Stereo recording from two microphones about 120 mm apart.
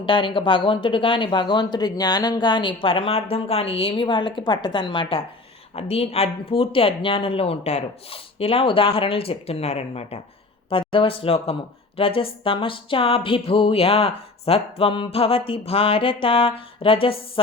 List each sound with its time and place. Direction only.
0.0 s speech: 45° left (ahead or behind)